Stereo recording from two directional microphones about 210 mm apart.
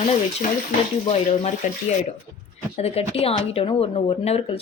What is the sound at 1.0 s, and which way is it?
Speech, 30° left (ahead or behind).